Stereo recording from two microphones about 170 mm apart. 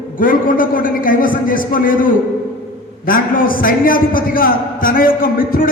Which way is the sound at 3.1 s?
55° left (ahead or behind).